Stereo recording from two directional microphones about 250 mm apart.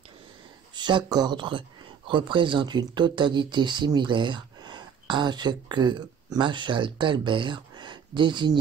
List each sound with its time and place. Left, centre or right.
0.7 s speech: centre